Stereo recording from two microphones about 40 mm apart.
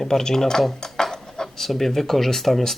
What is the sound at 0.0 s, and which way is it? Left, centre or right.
Speech, centre.